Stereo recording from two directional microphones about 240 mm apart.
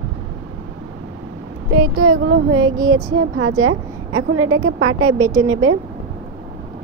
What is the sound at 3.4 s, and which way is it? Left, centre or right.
A woman's voice, right.